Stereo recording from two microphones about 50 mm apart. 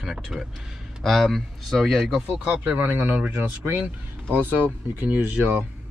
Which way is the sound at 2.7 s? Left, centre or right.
Right.